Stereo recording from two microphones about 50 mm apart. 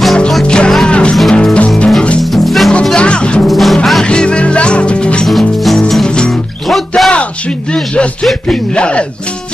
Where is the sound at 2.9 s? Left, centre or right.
Left.